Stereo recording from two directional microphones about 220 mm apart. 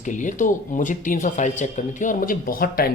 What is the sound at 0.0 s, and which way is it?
Speech, 35° left (ahead or behind).